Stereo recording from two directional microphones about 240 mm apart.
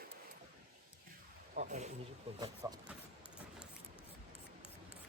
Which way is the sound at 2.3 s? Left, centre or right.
Centre.